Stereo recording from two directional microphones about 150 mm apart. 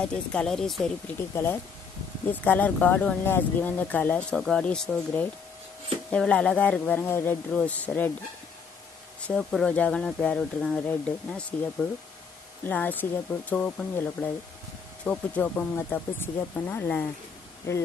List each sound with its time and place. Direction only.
0.0 s speech: 5° left (ahead or behind)
1.3 s speech: 15° left (ahead or behind)
9.3 s speech: 5° left (ahead or behind); by 17.8 s 20° left (ahead or behind)